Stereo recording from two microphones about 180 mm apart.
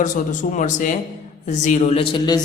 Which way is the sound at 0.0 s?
45° left (ahead or behind).